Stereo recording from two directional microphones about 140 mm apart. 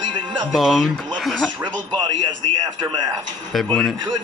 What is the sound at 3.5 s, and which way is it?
Speech, centre (ahead or behind).